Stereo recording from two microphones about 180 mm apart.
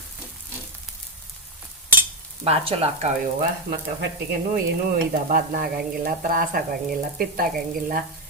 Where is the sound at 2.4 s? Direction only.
30° right (ahead or behind).